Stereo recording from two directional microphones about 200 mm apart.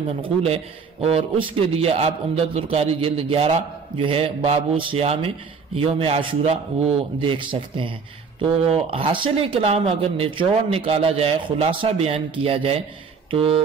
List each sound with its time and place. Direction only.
0.2 s a man's voice: 30° right (ahead or behind)